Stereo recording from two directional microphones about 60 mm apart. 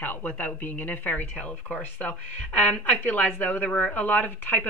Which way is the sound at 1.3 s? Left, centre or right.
Centre.